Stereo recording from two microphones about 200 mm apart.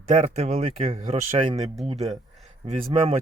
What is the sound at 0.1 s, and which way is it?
Speech, 35° right (ahead or behind).